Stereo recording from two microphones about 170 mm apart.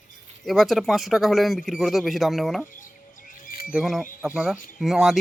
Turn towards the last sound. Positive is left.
turn(degrees=0)  # may be behind; listen again after turning